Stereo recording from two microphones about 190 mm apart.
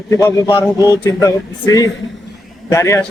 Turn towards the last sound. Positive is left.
turn(degrees=15)  # may be behind; listen again after turning